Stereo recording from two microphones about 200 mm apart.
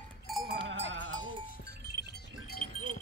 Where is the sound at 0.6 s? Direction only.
70° right (ahead or behind).